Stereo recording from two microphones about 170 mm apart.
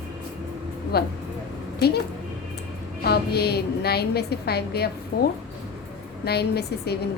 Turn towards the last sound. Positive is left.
turn(degrees=70)  # may be behind; listen again after turning